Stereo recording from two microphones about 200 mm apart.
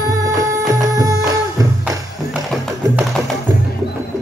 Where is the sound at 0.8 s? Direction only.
15° right (ahead or behind).